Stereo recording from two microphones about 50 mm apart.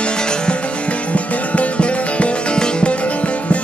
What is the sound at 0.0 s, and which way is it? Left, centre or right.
Music, centre.